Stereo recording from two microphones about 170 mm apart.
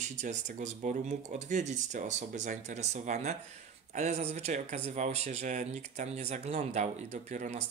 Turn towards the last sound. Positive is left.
turn(degrees=-45)  # may be behind; listen again after turning